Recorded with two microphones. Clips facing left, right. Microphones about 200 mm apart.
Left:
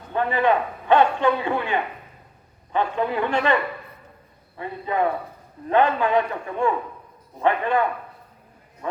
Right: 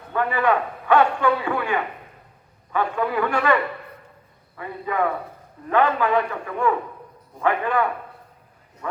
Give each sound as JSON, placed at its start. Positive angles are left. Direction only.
{"t": 0.1, "sound": "a man's voice", "side_deg": 25}
{"t": 4.9, "sound": "a man's voice", "side_deg": 25}